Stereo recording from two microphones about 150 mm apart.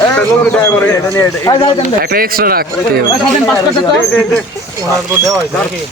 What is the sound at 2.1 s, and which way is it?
Speech, 80° right.